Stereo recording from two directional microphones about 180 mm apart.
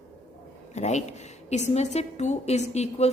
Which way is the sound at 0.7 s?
40° left (ahead or behind).